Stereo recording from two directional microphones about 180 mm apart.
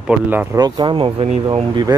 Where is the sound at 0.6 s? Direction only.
25° right (ahead or behind).